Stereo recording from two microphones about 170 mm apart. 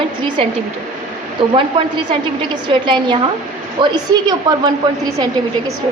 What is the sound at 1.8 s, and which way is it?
A woman's voice, 35° right (ahead or behind).